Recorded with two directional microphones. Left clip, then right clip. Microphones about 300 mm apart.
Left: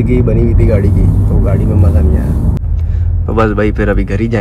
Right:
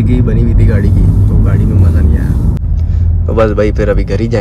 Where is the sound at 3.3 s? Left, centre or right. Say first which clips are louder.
Right 2 dB; centre.